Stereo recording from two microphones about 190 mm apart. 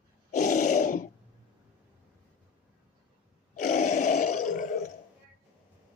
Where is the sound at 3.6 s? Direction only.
40° left (ahead or behind).